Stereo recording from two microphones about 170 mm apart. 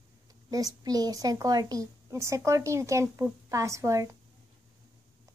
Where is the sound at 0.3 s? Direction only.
20° right (ahead or behind).